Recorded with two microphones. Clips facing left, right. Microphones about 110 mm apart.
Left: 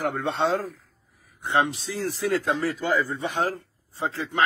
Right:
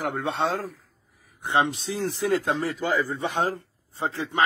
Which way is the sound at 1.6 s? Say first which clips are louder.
Right 1 dB; 25° right (ahead or behind).